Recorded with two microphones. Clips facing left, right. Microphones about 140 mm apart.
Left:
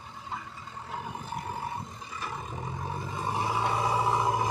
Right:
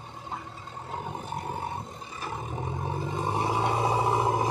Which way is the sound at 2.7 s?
25° right (ahead or behind).